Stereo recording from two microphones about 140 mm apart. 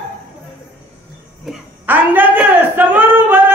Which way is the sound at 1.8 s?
15° right (ahead or behind).